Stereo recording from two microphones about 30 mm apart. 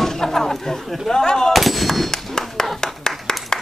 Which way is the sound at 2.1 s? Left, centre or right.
Centre.